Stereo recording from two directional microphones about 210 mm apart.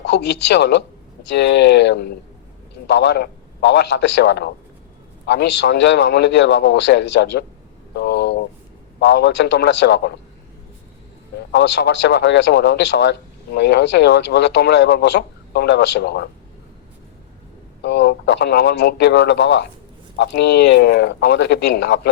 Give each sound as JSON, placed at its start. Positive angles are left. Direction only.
{"t": 0.0, "sound": "a man's voice", "side_deg": 55}
{"t": 11.5, "sound": "a man's voice", "side_deg": 55}
{"t": 17.8, "sound": "a man's voice", "side_deg": 55}